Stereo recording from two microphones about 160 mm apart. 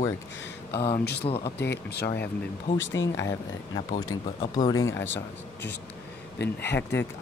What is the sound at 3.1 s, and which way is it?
Speech, 15° left (ahead or behind).